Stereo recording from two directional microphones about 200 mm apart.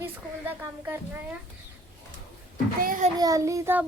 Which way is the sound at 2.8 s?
40° right (ahead or behind).